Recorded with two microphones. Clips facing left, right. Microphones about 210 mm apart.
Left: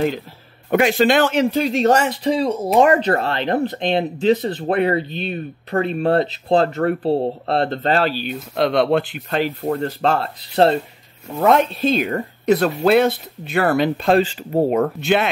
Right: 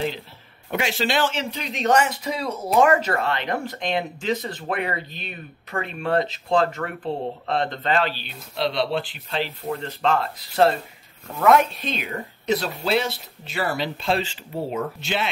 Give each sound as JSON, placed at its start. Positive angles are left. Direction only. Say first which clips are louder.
{"t": 0.7, "sound": "speech", "louder": "left 9 dB", "side_deg": 55}
{"t": 11.8, "sound": "speech", "louder": "left 11 dB", "side_deg": 45}